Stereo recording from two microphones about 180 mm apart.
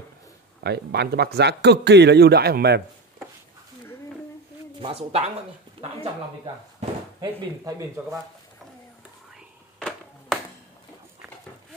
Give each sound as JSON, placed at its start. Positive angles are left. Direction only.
{"t": 0.7, "sound": "a man's voice", "side_deg": -65}
{"t": 4.7, "sound": "speech", "side_deg": -30}
{"t": 9.8, "sound": "a sound", "side_deg": 5}